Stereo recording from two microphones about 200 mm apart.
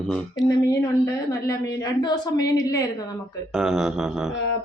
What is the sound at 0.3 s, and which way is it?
A woman's voice, 15° left (ahead or behind).